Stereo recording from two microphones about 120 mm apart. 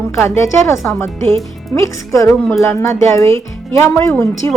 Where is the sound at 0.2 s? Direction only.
25° left (ahead or behind).